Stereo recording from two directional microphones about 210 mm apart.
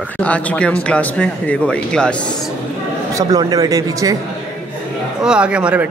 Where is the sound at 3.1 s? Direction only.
15° right (ahead or behind).